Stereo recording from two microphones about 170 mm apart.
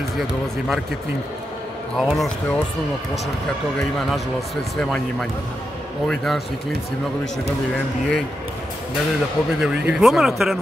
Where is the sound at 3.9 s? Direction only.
Centre (ahead or behind).